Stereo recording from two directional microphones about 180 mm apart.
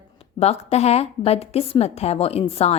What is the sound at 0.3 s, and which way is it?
A woman's voice, 35° left (ahead or behind).